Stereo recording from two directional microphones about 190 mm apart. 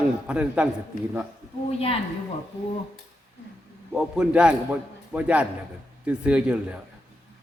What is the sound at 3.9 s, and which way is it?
A man's voice, 5° right (ahead or behind).